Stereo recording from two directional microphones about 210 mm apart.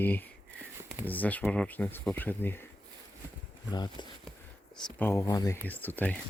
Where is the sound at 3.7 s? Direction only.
20° left (ahead or behind).